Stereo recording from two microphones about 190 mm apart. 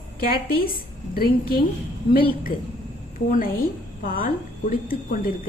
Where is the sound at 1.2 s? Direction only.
50° left (ahead or behind).